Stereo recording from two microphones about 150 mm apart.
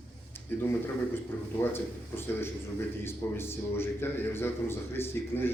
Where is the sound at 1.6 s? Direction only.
15° left (ahead or behind).